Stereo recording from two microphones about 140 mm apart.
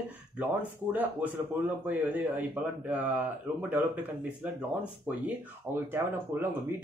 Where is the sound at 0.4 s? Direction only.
10° right (ahead or behind).